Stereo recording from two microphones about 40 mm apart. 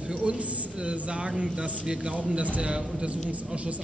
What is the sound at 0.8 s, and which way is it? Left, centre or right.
A man's voice, right.